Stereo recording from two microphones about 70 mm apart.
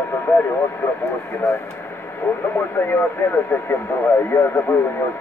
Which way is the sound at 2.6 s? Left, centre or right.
Left.